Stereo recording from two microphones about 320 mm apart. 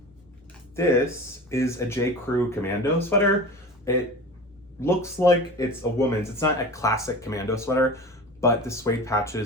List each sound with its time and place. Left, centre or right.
0.8 s speech: centre
4.8 s speech: centre